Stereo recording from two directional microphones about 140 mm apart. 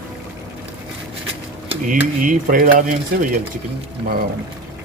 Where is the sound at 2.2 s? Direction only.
75° right (ahead or behind).